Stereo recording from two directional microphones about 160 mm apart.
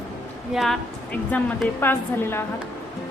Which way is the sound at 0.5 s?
Centre (ahead or behind).